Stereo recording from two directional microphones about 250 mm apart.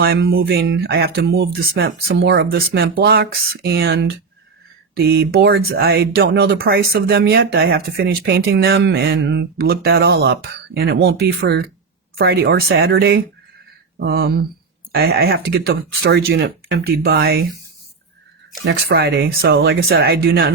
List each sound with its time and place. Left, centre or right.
0.0 s speech: right
18.6 s speech: right